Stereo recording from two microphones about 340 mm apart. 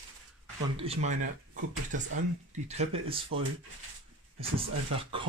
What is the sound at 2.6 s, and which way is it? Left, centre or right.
Speech, centre.